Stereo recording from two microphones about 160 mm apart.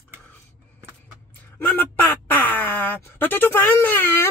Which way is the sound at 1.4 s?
10° left (ahead or behind).